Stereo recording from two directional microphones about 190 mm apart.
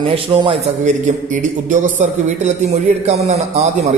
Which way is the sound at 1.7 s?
40° right (ahead or behind).